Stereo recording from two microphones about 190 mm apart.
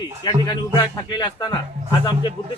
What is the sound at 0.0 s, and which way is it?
A man's voice, 20° left (ahead or behind).